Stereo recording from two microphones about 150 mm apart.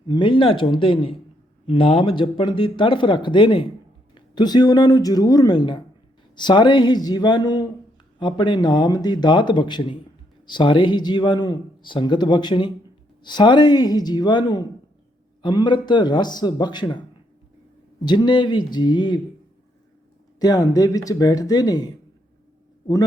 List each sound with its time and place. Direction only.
0.1 s speech: 35° left (ahead or behind)
18.0 s speech: 30° left (ahead or behind)
20.4 s speech: 25° left (ahead or behind)